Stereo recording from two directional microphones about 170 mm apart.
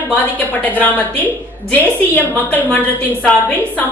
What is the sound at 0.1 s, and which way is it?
Speech, 10° left (ahead or behind).